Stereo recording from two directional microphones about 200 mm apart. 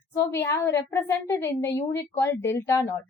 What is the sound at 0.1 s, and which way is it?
A woman's voice, 10° left (ahead or behind).